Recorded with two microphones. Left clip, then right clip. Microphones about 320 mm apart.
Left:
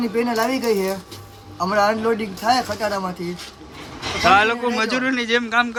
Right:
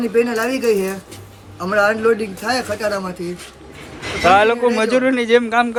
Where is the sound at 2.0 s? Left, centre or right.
Centre.